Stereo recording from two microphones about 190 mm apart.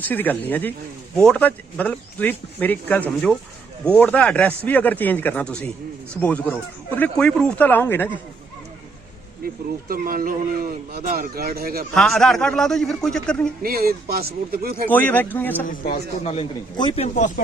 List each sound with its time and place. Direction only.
0.0 s speech: 10° left (ahead or behind)
9.9 s a man's voice: 50° right (ahead or behind)
11.9 s a man's voice: centre (ahead or behind)
13.6 s a man's voice: 50° right (ahead or behind)
14.8 s speech: 10° left (ahead or behind)
15.6 s a man's voice: 45° left (ahead or behind)